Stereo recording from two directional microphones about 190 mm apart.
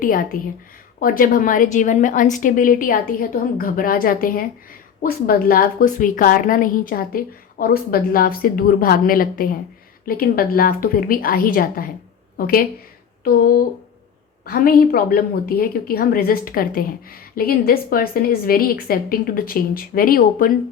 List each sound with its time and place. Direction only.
0.0 s speech: 45° left (ahead or behind)